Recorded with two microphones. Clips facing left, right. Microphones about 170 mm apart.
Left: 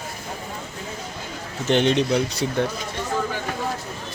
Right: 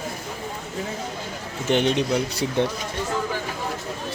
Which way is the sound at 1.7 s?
10° right (ahead or behind).